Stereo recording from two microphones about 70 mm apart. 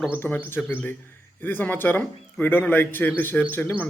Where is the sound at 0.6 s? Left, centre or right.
Centre.